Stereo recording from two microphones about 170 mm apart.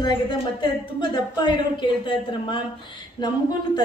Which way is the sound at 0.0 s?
25° left (ahead or behind).